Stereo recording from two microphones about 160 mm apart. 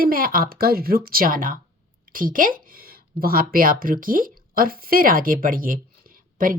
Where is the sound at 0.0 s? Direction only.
65° right (ahead or behind).